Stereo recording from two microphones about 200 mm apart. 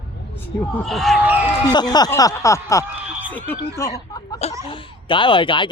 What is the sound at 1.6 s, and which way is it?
Speech, 20° left (ahead or behind).